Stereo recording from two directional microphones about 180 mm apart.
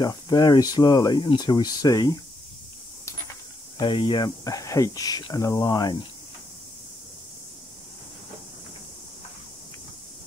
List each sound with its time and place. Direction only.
0.0 s speech: 20° left (ahead or behind)
3.7 s speech: 25° left (ahead or behind)